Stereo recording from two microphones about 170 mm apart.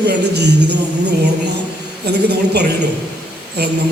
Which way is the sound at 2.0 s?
75° right (ahead or behind).